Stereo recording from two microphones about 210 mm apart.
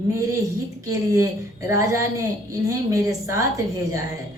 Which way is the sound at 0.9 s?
15° right (ahead or behind).